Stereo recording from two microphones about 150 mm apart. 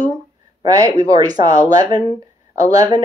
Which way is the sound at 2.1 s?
45° left (ahead or behind).